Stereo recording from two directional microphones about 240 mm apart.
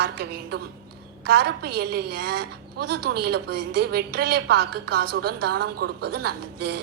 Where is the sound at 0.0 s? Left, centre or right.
Right.